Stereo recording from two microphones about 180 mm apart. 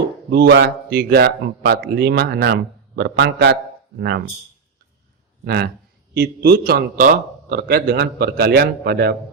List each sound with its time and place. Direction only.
0.3 s speech: 60° right (ahead or behind)
5.5 s speech: 60° right (ahead or behind)